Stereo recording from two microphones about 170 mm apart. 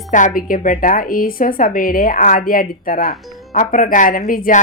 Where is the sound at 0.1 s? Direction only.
45° left (ahead or behind).